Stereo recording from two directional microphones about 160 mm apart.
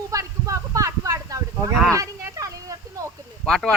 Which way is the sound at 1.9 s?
20° right (ahead or behind).